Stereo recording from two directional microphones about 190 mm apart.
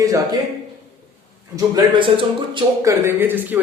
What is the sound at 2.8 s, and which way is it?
Speech, 15° right (ahead or behind).